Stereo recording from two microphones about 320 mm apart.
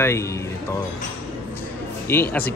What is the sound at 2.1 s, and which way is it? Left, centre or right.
Speech, centre.